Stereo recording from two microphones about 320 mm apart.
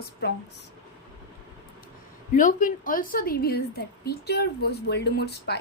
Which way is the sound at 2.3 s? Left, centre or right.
Left.